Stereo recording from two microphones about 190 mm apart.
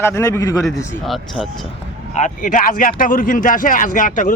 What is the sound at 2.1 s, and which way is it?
Speech, 40° left (ahead or behind).